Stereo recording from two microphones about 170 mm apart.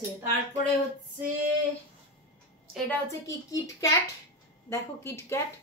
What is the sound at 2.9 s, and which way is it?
A woman's voice, 20° left (ahead or behind).